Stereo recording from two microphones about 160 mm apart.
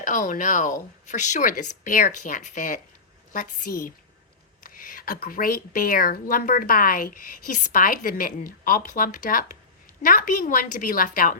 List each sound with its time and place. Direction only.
0.0 s speech: 50° left (ahead or behind)